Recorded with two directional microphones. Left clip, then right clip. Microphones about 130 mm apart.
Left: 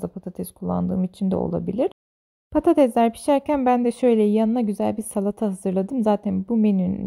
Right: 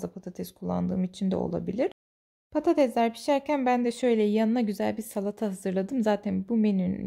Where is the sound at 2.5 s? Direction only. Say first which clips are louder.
Left 6 dB; 55° left (ahead or behind).